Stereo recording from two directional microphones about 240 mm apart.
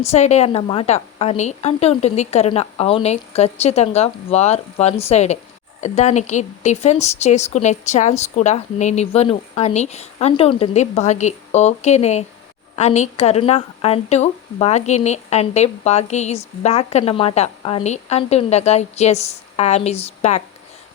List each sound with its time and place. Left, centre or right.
0.1 s speech: left